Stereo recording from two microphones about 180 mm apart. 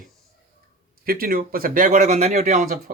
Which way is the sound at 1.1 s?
55° right (ahead or behind).